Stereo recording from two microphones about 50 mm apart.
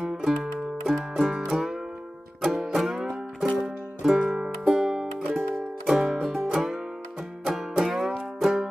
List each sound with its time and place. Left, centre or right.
0.0 s music: centre